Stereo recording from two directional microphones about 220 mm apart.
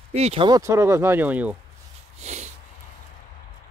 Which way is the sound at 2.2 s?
30° right (ahead or behind).